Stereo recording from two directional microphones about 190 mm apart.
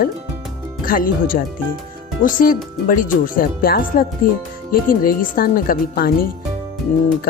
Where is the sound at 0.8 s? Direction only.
50° left (ahead or behind).